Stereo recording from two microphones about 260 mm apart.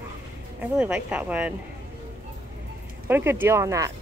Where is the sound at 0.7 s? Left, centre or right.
Centre.